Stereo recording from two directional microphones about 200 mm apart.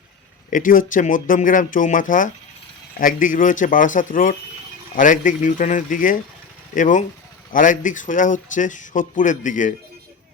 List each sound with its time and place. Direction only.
0.5 s speech: 45° left (ahead or behind)